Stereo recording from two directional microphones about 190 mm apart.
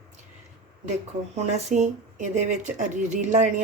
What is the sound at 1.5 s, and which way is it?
A woman's voice, 35° right (ahead or behind).